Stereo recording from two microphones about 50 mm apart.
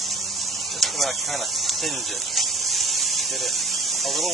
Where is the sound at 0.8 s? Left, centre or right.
Centre.